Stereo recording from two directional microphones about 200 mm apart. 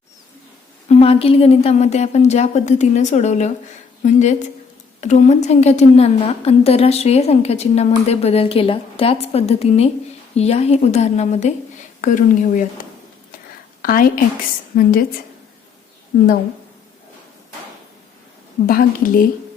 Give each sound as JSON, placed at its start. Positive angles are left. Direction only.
{"t": 0.9, "sound": "a woman's voice", "side_deg": 30}
{"t": 13.8, "sound": "a woman's voice", "side_deg": 45}
{"t": 18.6, "sound": "a woman's voice", "side_deg": 45}